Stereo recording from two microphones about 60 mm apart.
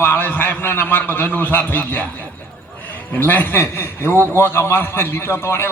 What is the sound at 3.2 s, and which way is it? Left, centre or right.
A man's voice, left.